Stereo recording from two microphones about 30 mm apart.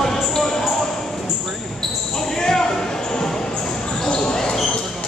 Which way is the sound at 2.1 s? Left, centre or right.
Centre.